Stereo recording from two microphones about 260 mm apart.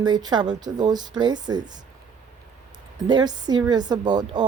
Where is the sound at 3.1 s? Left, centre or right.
Centre.